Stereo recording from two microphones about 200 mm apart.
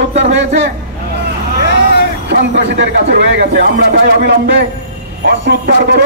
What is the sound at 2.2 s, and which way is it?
Speech, 60° right (ahead or behind).